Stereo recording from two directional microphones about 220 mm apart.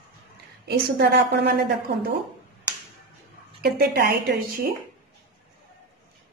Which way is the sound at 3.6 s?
45° right (ahead or behind).